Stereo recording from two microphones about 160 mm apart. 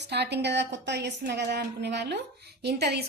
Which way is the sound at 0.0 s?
90° right.